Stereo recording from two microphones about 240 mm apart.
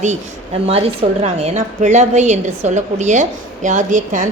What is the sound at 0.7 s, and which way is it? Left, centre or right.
A woman's voice, right.